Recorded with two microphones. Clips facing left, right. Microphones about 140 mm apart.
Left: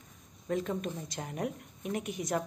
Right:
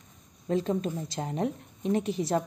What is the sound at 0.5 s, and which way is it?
A woman's voice, 30° right (ahead or behind).